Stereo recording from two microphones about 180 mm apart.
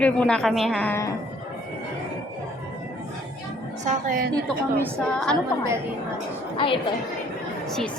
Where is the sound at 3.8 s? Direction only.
50° right (ahead or behind).